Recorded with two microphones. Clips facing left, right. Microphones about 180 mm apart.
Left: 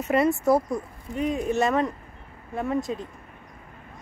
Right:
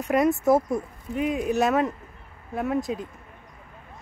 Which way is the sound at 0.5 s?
20° right (ahead or behind).